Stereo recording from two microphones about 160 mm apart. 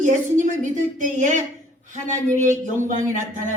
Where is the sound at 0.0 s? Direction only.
50° right (ahead or behind).